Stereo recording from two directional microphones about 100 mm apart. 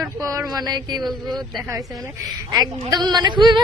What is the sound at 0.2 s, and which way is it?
Speech, 40° right (ahead or behind).